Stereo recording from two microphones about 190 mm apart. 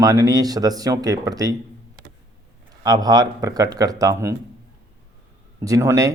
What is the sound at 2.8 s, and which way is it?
Speech, 20° right (ahead or behind).